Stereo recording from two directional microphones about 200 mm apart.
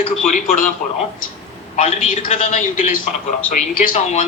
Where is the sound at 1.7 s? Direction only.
40° left (ahead or behind).